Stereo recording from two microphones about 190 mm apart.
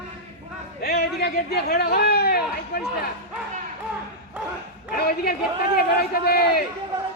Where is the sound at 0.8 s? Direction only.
55° left (ahead or behind).